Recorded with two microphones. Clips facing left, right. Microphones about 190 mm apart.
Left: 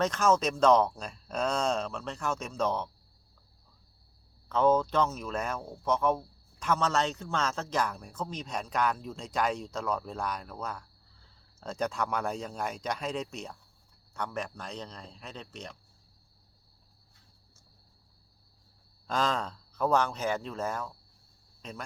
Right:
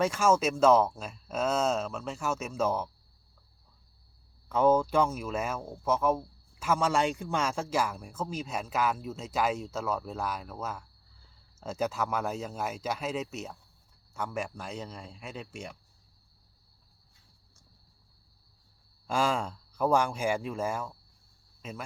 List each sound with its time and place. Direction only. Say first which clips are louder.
0.0 s speech: right 1 dB; 10° right (ahead or behind)
4.4 s speech: right 1 dB; 10° right (ahead or behind)
19.0 s speech: right 1 dB; 10° right (ahead or behind)